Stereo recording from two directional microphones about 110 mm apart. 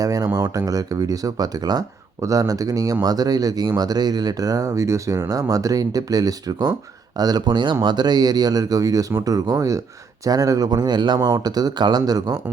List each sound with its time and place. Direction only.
0.0 s speech: 35° right (ahead or behind)